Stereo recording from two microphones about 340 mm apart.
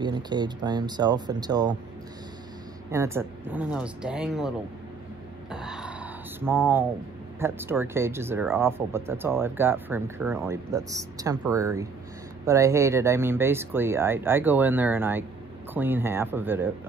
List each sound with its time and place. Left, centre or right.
0.0 s speech: centre
2.9 s speech: centre
5.5 s a sound: centre
7.3 s speech: centre